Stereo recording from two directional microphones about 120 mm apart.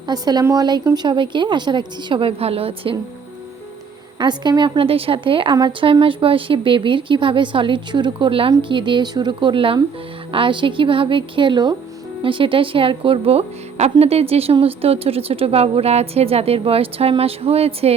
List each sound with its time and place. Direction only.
0.1 s a woman's voice: 35° right (ahead or behind); by 3.0 s 50° right (ahead or behind)
4.2 s a woman's voice: 35° right (ahead or behind); by 17.9 s 55° right (ahead or behind)